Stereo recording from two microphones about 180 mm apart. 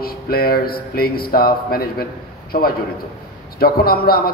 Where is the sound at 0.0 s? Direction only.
55° left (ahead or behind).